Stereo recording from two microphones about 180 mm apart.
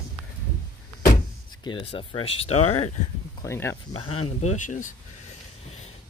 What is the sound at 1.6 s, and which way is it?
Speech, 30° left (ahead or behind).